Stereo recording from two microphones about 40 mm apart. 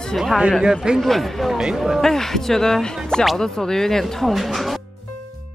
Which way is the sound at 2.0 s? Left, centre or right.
Centre.